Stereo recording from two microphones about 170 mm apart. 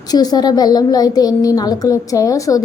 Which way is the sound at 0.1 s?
25° left (ahead or behind).